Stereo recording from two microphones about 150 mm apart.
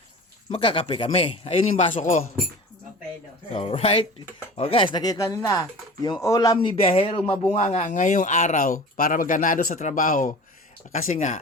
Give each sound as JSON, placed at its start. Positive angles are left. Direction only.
{"t": 0.5, "sound": "a man's voice", "side_deg": 35}
{"t": 3.5, "sound": "a man's voice", "side_deg": 40}
{"t": 7.5, "sound": "speech", "side_deg": 45}